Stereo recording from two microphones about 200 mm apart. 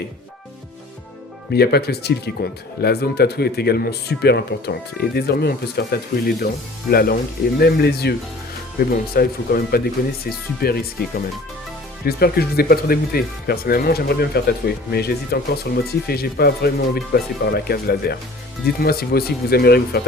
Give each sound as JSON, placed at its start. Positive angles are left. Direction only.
{"t": 1.5, "sound": "speech", "side_deg": 55}
{"t": 12.0, "sound": "speech", "side_deg": 50}